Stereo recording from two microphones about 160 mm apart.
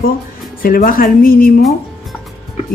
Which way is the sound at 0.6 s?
65° left (ahead or behind).